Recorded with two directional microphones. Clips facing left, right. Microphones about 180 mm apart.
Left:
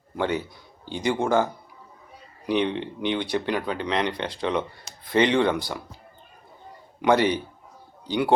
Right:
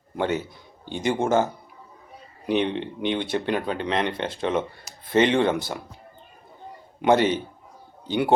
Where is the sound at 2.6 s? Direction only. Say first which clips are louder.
Even; 15° left (ahead or behind).